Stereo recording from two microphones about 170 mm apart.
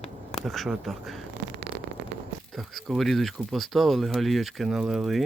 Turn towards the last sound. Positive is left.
turn(degrees=0)  # may be behind; listen again after turning